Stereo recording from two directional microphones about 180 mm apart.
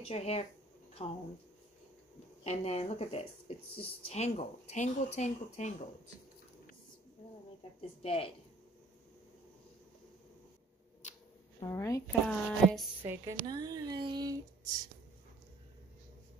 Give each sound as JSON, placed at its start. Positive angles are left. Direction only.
{"t": 0.1, "sound": "speech", "side_deg": 35}
{"t": 2.4, "sound": "speech", "side_deg": 35}
{"t": 7.8, "sound": "speech", "side_deg": 30}
{"t": 11.6, "sound": "speech", "side_deg": 15}
{"t": 12.3, "sound": "speech", "side_deg": 0}
{"t": 13.0, "sound": "a woman's voice", "side_deg": -10}
{"t": 13.5, "sound": "speech", "side_deg": -20}